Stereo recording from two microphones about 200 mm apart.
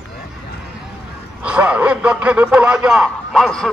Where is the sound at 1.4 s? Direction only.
5° right (ahead or behind).